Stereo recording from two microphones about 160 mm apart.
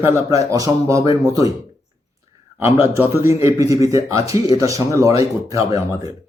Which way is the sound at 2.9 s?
15° right (ahead or behind).